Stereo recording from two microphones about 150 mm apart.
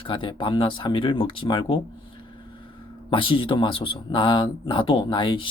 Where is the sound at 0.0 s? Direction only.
35° left (ahead or behind).